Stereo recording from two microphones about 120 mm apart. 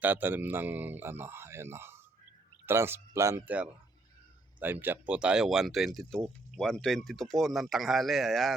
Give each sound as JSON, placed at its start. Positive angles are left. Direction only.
{"t": 0.0, "sound": "a man's voice", "side_deg": -15}